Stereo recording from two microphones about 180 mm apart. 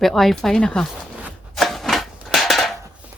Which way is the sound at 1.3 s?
Centre (ahead or behind).